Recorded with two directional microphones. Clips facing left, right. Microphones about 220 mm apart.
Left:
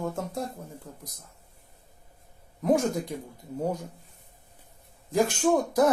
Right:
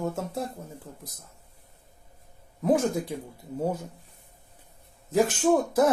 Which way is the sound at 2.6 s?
5° right (ahead or behind).